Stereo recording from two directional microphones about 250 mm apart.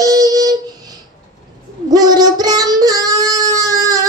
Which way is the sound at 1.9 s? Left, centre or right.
Centre.